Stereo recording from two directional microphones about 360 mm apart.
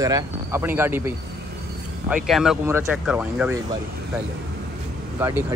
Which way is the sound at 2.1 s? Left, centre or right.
Centre.